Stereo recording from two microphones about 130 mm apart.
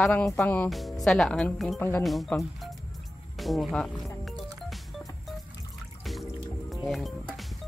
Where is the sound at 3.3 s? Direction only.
Centre (ahead or behind).